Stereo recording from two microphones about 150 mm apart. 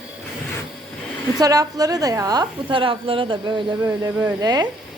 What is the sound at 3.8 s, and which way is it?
Speech, 20° right (ahead or behind).